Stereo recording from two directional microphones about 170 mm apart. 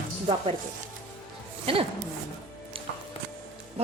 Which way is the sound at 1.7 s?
35° right (ahead or behind).